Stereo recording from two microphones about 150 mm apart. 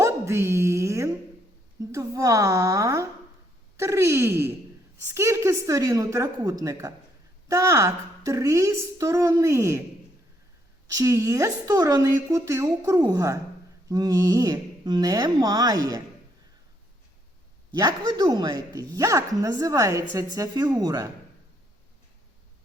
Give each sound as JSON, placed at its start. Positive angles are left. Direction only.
{"t": 0.0, "sound": "dog", "side_deg": -20}
{"t": 1.9, "sound": "a woman's voice", "side_deg": -20}
{"t": 10.9, "sound": "a woman's voice", "side_deg": -20}
{"t": 17.7, "sound": "a woman's voice", "side_deg": -25}